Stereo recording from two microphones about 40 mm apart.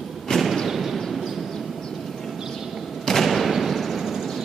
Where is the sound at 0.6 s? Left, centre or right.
Centre.